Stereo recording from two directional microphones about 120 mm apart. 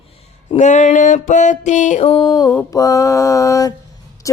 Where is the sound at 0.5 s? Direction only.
80° left.